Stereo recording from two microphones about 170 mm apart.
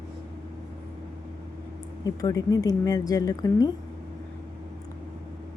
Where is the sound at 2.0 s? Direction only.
20° left (ahead or behind).